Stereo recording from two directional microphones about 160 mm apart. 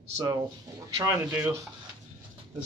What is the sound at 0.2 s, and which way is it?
Speech, 25° right (ahead or behind).